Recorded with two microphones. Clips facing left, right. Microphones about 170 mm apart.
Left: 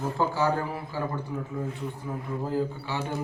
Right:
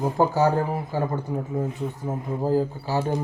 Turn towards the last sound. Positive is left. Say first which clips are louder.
# right 7 dB
turn(degrees=-40)  # may be behind; listen again after turning